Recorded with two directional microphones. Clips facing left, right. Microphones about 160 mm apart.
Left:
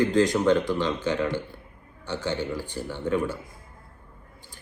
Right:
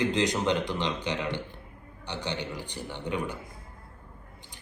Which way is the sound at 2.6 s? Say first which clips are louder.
Left 5 dB; 45° left (ahead or behind).